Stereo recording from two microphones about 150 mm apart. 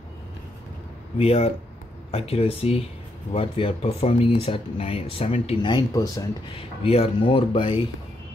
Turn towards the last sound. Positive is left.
turn(degrees=35)  # may be behind; listen again after turning